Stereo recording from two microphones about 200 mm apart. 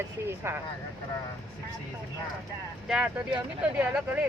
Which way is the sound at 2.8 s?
5° right (ahead or behind).